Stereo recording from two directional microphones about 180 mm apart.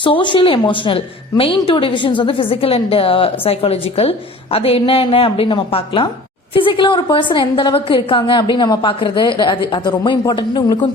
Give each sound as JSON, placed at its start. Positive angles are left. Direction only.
{"t": 0.0, "sound": "a woman's voice", "side_deg": 25}